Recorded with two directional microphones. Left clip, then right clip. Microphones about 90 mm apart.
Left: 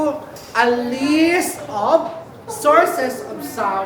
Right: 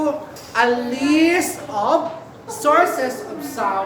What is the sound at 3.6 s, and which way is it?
Speech, 20° left (ahead or behind).